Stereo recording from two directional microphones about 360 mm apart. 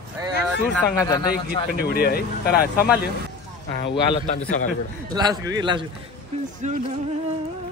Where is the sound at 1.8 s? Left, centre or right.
Left.